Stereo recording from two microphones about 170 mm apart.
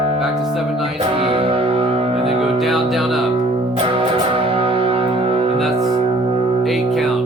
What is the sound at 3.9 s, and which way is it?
Music, 30° right (ahead or behind).